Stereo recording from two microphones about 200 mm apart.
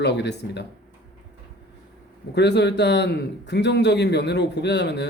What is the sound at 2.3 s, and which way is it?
A man's voice, 55° left (ahead or behind).